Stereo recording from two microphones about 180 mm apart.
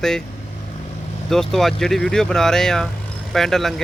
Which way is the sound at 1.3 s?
Centre (ahead or behind).